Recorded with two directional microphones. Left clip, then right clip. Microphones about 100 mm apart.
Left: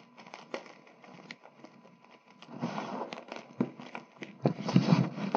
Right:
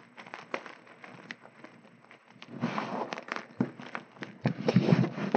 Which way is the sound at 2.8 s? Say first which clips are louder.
Right 3 dB; 25° right (ahead or behind).